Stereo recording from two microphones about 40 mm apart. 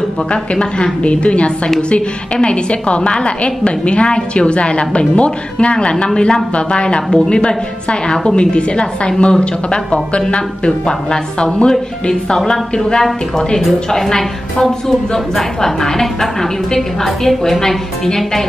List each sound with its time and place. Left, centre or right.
0.3 s a woman's voice: left